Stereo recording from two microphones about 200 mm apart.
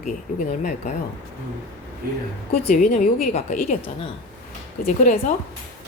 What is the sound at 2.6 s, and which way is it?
A woman's voice, 35° left (ahead or behind).